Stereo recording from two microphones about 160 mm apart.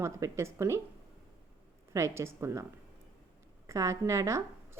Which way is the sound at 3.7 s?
20° right (ahead or behind).